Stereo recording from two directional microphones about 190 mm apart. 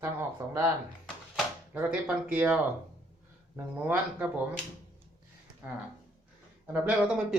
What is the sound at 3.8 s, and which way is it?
Speech, 10° right (ahead or behind).